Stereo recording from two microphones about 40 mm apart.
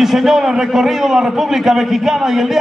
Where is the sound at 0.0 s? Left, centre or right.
Centre.